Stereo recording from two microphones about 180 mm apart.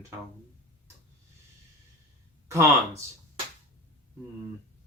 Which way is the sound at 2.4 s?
15° right (ahead or behind).